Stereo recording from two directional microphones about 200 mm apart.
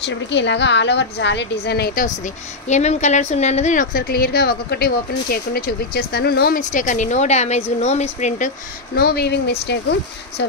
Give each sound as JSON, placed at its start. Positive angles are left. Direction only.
{"t": 0.0, "sound": "a woman's voice", "side_deg": 60}
{"t": 2.7, "sound": "a woman's voice", "side_deg": 35}
{"t": 8.9, "sound": "a woman's voice", "side_deg": 55}